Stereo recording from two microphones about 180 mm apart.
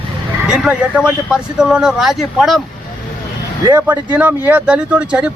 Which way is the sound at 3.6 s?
25° right (ahead or behind).